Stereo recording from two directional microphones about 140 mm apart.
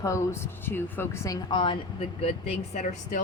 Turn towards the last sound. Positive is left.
turn(degrees=65)  # may be behind; listen again after turning